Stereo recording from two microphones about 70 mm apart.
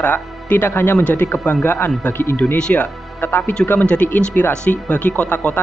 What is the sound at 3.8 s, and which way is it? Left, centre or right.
Speech, centre.